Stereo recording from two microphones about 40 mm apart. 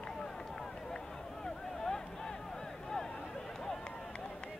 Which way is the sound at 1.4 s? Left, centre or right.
Centre.